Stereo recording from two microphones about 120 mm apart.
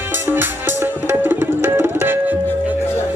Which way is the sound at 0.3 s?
20° right (ahead or behind).